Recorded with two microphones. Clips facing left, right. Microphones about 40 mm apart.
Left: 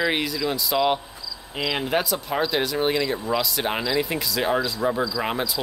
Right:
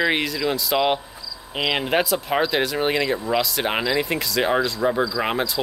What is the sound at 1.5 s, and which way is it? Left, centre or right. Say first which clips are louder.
Speech: right 3 dB; right.